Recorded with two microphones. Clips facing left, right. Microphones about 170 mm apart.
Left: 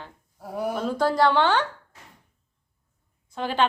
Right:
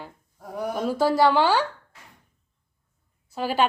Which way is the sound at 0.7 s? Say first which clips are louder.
Right 2 dB; 10° right (ahead or behind).